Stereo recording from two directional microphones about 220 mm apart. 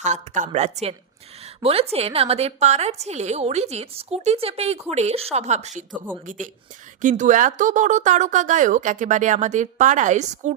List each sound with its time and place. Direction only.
0.0 s a woman's voice: 35° right (ahead or behind)